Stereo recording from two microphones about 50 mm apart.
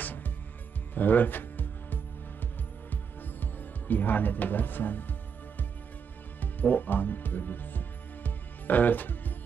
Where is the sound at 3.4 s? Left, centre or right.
Left.